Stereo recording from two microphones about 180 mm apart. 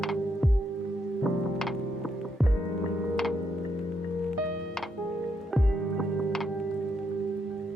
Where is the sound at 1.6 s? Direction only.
Centre (ahead or behind).